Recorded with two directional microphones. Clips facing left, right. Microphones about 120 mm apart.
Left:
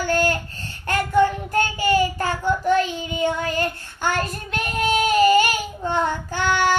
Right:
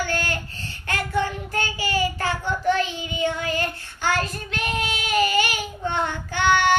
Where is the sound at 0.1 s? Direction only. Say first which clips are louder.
Left 7 dB; 45° left (ahead or behind).